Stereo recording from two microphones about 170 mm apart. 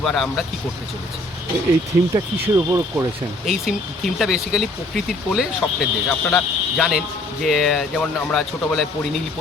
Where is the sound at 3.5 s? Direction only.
Centre (ahead or behind).